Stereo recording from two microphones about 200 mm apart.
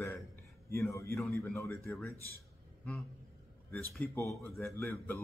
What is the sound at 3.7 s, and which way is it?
Speech, 10° left (ahead or behind).